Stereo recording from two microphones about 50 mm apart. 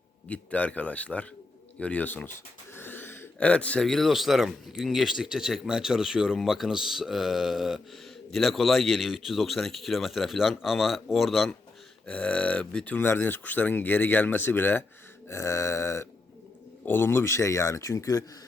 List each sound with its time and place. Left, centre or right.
0.3 s speech: left
2.7 s wheeze: left
3.4 s speech: left
3.8 s speech: centre
12.0 s speech: left
13.1 s speech: left
15.3 s a sound: left
16.8 s speech: left